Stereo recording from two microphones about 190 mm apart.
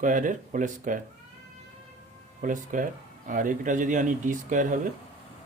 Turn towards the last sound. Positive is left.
turn(degrees=-45)  # may be behind; listen again after turning